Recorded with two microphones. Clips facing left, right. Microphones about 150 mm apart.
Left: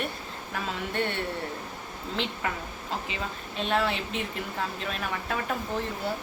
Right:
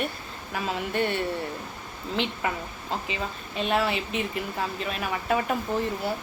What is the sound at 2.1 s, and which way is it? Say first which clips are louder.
Speech: right 4 dB; 5° right (ahead or behind).